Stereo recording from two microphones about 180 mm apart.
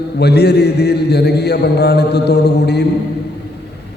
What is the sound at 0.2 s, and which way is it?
A man's voice, 65° left (ahead or behind).